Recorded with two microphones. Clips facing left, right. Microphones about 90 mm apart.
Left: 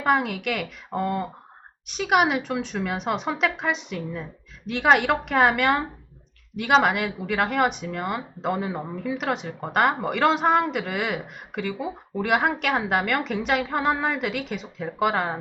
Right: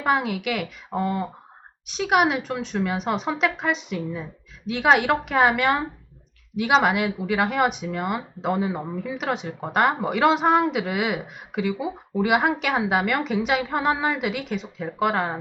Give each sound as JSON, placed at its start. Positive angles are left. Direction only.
{"t": 0.0, "sound": "speech", "side_deg": 0}